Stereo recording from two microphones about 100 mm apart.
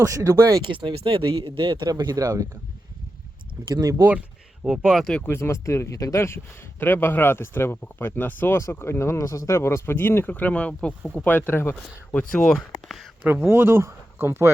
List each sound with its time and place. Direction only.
0.0 s speech: 30° right (ahead or behind)
0.6 s speech: 55° right (ahead or behind)
0.9 s a man's voice: 65° right (ahead or behind)
1.9 s speech: 45° right (ahead or behind)
3.7 s speech: 40° right (ahead or behind)
4.6 s speech: 5° right (ahead or behind)
5.3 s speech: 25° left (ahead or behind)
11.7 s speech: 10° left (ahead or behind)
13.2 s speech: 20° right (ahead or behind)